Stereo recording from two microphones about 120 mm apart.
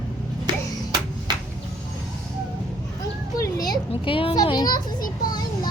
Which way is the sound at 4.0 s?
50° left (ahead or behind).